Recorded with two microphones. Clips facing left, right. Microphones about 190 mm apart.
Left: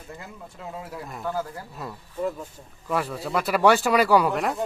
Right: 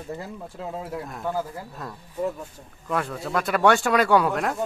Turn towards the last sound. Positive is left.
turn(degrees=0)  # may be behind; listen again after turning